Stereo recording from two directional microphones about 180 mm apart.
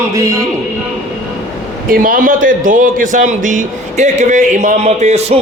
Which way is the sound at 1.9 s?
50° right (ahead or behind).